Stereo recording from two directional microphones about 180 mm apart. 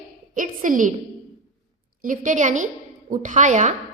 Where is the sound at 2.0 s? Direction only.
45° right (ahead or behind).